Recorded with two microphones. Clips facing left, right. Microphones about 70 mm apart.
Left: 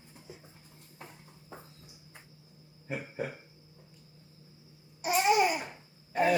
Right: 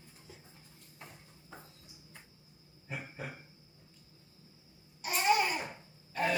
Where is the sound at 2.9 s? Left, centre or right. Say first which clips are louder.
Left 6 dB; left.